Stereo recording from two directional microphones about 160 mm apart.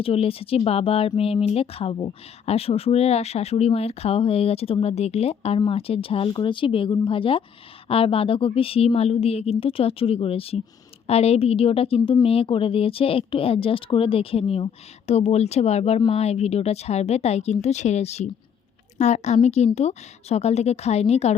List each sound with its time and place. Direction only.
0.0 s a woman's voice: 35° left (ahead or behind)